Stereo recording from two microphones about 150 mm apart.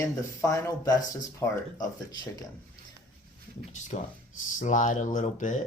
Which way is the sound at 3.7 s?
55° left (ahead or behind).